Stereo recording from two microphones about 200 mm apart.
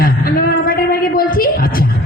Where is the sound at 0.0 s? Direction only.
45° left (ahead or behind).